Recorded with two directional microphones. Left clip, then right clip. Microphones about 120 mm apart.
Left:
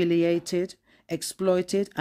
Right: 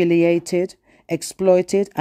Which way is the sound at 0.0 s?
40° right (ahead or behind).